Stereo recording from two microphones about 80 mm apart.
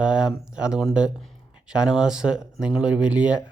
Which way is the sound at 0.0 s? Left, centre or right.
Centre.